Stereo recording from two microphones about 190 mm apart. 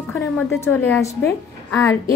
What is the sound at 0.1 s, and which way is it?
A woman's voice, 15° left (ahead or behind).